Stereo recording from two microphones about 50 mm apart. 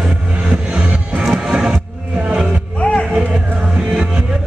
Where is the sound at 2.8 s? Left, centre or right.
Left.